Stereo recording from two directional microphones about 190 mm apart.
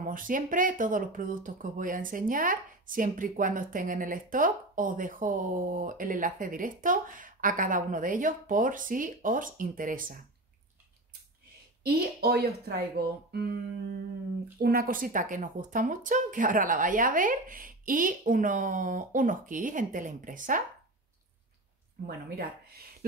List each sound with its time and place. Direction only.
0.0 s speech: 45° right (ahead or behind)
11.8 s speech: 55° right (ahead or behind)
14.6 s speech: 50° right (ahead or behind)